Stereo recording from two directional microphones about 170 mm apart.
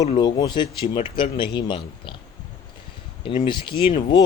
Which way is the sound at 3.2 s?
30° left (ahead or behind).